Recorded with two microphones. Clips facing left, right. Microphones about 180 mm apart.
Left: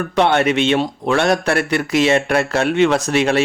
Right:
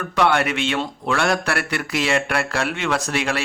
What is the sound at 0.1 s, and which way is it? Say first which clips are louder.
Speech: left 3 dB; 25° left (ahead or behind).